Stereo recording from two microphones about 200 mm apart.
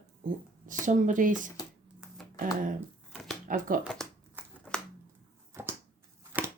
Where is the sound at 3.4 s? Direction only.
45° right (ahead or behind).